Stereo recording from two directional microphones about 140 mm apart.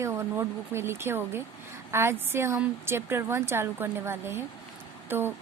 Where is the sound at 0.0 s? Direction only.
20° right (ahead or behind).